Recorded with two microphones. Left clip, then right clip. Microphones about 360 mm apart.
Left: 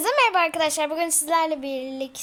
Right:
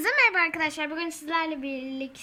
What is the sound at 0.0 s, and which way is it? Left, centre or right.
A child's voice, centre.